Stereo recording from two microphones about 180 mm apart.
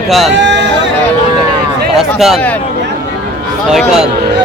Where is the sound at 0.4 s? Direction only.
75° right (ahead or behind).